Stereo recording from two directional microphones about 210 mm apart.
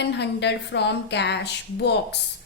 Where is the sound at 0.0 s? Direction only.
55° left (ahead or behind).